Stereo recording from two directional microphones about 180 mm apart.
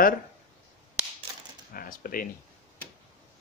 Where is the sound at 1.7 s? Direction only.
50° left (ahead or behind).